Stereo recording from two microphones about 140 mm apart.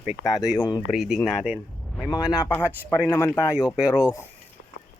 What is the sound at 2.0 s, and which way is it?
Speech, 25° left (ahead or behind).